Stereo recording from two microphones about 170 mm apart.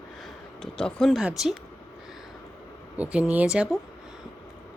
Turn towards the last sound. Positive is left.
turn(degrees=-5)  # may be behind; listen again after turning